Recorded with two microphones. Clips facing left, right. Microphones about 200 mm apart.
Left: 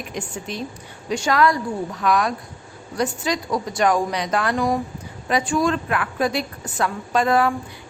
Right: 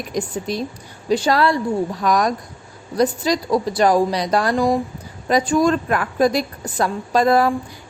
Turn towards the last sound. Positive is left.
turn(degrees=-40)  # may be behind; listen again after turning